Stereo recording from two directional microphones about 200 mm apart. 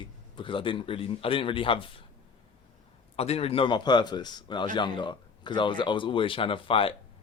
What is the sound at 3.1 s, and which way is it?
Speech, 30° left (ahead or behind).